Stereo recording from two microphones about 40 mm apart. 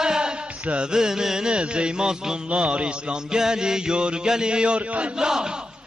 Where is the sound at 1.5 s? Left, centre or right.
Right.